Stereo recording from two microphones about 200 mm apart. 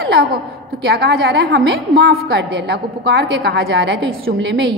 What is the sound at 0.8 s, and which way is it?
A woman's voice, 55° right (ahead or behind).